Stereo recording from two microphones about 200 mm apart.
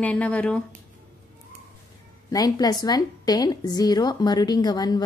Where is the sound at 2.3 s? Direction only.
20° left (ahead or behind).